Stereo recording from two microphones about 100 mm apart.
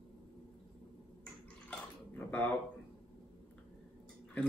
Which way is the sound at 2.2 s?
15° left (ahead or behind).